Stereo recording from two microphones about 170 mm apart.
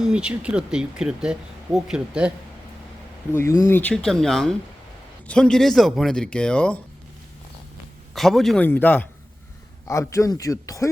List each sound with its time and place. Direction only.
0.0 s speech: 5° right (ahead or behind)
3.3 s speech: 15° left (ahead or behind)
8.1 s a man's voice: centre (ahead or behind); by 10.8 s 20° left (ahead or behind)